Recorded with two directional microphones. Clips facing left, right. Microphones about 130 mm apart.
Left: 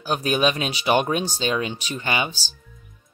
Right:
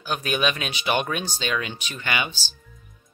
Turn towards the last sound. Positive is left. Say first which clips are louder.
# left 3 dB
turn(degrees=30)  # may be behind; listen again after turning